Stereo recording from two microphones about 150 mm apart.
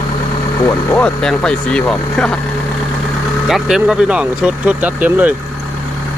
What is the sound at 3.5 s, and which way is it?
Speech, 5° right (ahead or behind).